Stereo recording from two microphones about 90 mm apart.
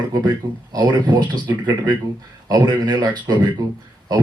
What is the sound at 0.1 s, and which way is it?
A man's voice, 45° right (ahead or behind).